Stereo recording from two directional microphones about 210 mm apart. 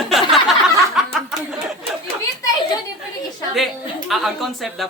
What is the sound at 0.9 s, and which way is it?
Snicker, centre (ahead or behind).